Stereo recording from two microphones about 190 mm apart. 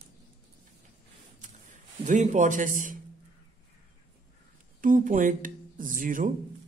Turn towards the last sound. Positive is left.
turn(degrees=-45)  # may be behind; listen again after turning